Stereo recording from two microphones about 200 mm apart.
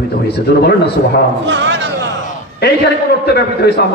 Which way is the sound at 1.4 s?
65° right (ahead or behind).